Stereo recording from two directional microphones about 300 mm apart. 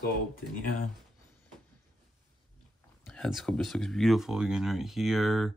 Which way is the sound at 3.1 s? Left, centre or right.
Centre.